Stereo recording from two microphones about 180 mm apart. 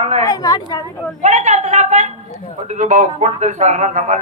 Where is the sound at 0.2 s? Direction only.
20° left (ahead or behind).